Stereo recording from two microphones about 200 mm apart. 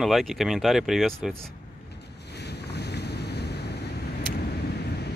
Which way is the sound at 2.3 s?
55° left (ahead or behind).